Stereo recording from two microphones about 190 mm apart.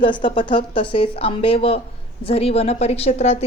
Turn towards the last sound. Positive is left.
turn(degrees=35)  # may be behind; listen again after turning